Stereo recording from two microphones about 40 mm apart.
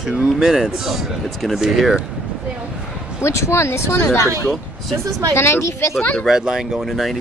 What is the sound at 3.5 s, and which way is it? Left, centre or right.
Speech, left.